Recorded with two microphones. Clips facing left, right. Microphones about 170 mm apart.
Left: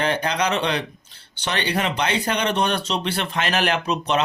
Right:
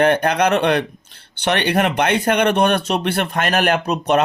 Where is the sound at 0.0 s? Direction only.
55° right (ahead or behind).